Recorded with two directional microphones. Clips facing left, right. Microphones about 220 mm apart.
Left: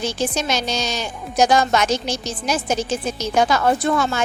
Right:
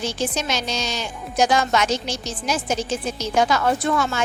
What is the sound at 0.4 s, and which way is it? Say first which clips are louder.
A woman's voice: left 3 dB; 40° left (ahead or behind).